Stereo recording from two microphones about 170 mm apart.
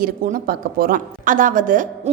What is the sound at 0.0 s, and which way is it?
A woman's voice, 60° right (ahead or behind).